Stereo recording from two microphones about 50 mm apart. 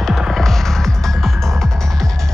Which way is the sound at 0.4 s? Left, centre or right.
Centre.